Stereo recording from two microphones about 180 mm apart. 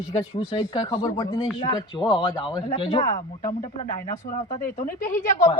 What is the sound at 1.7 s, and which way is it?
Speech, 25° left (ahead or behind).